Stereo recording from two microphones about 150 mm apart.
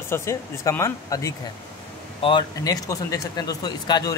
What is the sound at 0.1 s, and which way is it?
Speech, 20° left (ahead or behind).